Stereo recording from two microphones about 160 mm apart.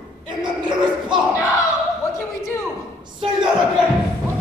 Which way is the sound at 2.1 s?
20° left (ahead or behind).